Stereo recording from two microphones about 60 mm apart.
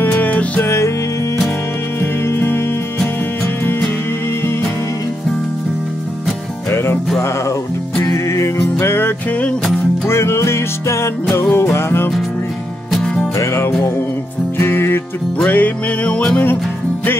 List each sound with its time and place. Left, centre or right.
0.0 s music: left
0.6 s music: left
2.0 s music: left
6.7 s music: left
8.0 s music: left
13.0 s music: centre
13.4 s music: left
14.6 s music: left
15.3 s music: left